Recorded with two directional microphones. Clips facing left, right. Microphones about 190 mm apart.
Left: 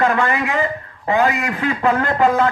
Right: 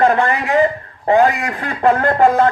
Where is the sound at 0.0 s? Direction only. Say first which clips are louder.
Right 3 dB; 40° right (ahead or behind).